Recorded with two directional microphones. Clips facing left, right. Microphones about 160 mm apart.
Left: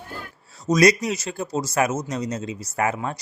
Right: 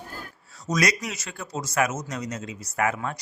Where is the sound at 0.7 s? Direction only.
30° left (ahead or behind).